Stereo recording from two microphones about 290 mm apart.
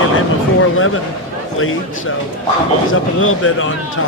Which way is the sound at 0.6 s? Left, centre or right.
Left.